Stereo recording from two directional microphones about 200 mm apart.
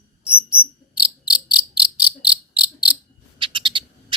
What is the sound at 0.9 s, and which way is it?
Insect, 5° right (ahead or behind).